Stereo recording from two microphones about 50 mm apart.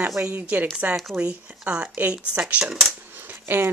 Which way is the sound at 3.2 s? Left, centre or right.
Right.